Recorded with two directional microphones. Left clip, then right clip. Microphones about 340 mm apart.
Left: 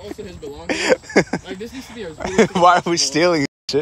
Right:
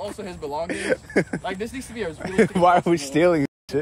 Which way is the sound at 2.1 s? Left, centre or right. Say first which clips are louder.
Left 5 dB; centre.